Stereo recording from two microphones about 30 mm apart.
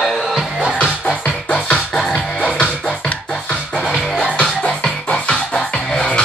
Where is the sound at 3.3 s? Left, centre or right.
Left.